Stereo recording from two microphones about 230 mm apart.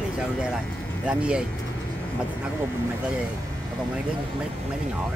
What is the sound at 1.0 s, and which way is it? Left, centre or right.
Speech, centre.